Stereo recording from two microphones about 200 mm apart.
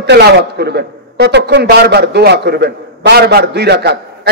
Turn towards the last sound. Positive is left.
turn(degrees=-55)  # may be behind; listen again after turning